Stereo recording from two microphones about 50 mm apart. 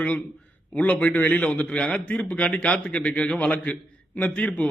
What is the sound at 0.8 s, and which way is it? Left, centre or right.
A man's voice, left.